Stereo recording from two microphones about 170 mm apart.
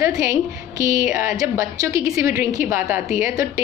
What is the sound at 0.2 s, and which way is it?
A woman's voice, 20° right (ahead or behind).